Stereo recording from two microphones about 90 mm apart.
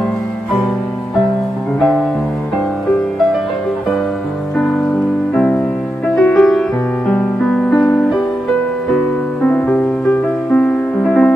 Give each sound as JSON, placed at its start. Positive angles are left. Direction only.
{"t": 4.6, "sound": "music", "side_deg": 10}
{"t": 9.4, "sound": "music", "side_deg": 15}